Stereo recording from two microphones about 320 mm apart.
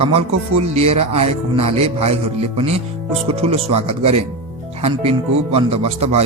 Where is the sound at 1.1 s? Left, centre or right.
Centre.